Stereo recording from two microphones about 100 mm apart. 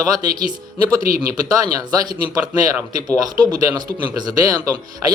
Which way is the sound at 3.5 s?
45° right (ahead or behind).